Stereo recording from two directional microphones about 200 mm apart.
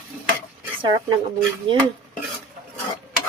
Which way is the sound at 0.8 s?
25° right (ahead or behind).